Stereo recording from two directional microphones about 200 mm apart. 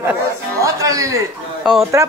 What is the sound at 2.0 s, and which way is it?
Speech, 15° right (ahead or behind).